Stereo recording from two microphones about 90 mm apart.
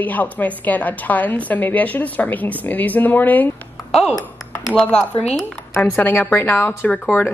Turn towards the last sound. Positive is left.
turn(degrees=20)  # may be behind; listen again after turning